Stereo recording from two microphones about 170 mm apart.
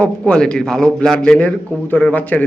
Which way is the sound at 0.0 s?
5° left (ahead or behind).